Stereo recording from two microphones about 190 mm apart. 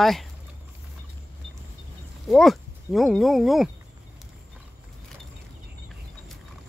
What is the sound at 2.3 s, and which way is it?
Speech, centre (ahead or behind).